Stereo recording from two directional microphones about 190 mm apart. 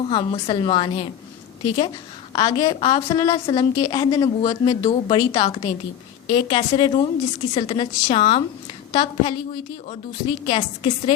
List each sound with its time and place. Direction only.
0.0 s a woman's voice: 25° left (ahead or behind)